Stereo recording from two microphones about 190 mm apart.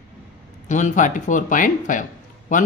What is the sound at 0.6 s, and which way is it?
Speech, 40° left (ahead or behind).